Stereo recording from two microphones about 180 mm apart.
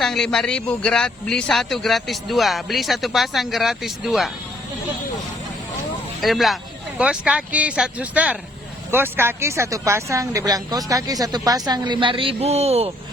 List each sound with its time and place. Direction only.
0.0 s speech: centre (ahead or behind)
6.2 s speech: centre (ahead or behind); by 12.9 s 35° right (ahead or behind)